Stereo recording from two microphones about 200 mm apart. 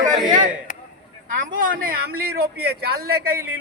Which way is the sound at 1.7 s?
45° right (ahead or behind).